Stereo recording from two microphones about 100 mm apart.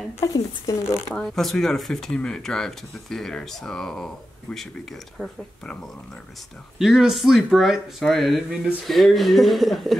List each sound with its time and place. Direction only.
0.2 s speech: 30° left (ahead or behind)
1.1 s speech: 5° left (ahead or behind)
6.8 s speech: 5° right (ahead or behind)